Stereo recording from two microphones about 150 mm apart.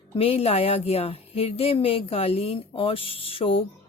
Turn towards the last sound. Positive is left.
turn(degrees=40)  # may be behind; listen again after turning